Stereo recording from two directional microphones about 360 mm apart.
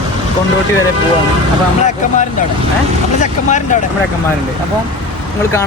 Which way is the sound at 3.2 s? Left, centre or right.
Centre.